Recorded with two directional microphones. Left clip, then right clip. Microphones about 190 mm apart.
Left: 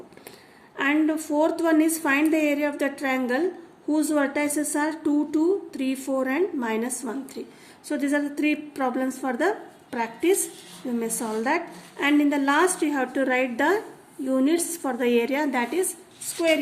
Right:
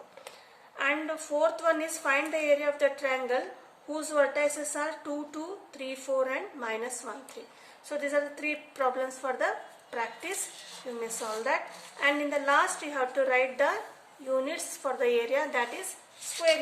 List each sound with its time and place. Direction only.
0.8 s a woman's voice: 50° left (ahead or behind)